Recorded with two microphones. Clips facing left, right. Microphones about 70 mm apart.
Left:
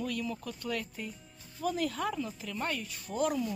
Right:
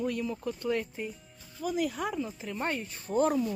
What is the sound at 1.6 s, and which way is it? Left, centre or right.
Speech, centre.